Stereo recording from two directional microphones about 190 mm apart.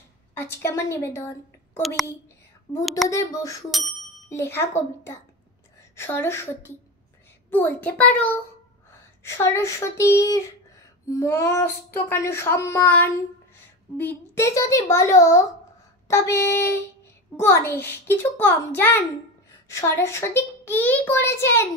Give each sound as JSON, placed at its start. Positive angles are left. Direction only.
{"t": 0.3, "sound": "a woman's voice", "side_deg": 10}
{"t": 2.8, "sound": "a woman's voice", "side_deg": 0}
{"t": 3.1, "sound": "a sound", "side_deg": 15}